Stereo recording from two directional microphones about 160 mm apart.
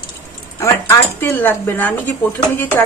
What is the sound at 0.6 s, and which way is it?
Speech, 15° left (ahead or behind).